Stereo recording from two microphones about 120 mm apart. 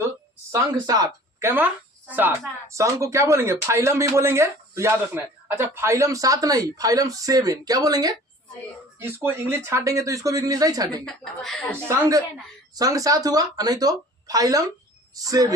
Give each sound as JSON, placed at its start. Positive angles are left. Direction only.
{"t": 0.5, "sound": "speech", "side_deg": -30}
{"t": 1.4, "sound": "speech", "side_deg": -20}
{"t": 2.7, "sound": "speech", "side_deg": -25}
{"t": 9.0, "sound": "speech", "side_deg": -15}
{"t": 11.0, "sound": "speech", "side_deg": 5}
{"t": 11.9, "sound": "a woman's voice", "side_deg": -30}